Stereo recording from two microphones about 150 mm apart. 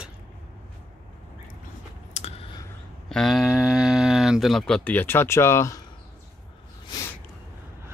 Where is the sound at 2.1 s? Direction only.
45° left (ahead or behind).